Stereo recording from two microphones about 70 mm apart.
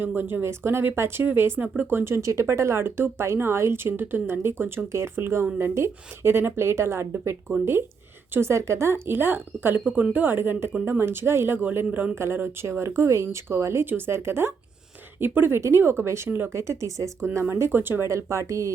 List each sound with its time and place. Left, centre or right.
0.0 s speech: right
2.1 s speech: right
9.8 s a woman's voice: centre
11.9 s a woman's voice: centre
12.1 s speech: right
16.5 s speech: right
18.1 s speech: right